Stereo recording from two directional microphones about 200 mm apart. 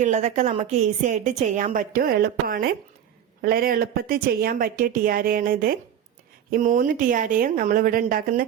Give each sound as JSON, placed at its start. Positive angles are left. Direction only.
{"t": 0.0, "sound": "a woman's voice", "side_deg": -35}